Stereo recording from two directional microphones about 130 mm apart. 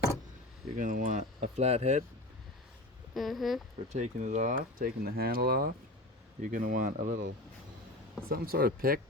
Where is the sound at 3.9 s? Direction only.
70° right (ahead or behind).